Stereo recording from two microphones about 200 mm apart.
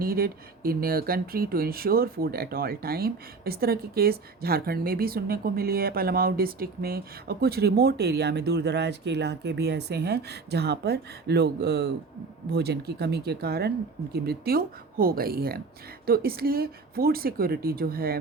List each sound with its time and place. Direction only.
0.0 s speech: 45° right (ahead or behind)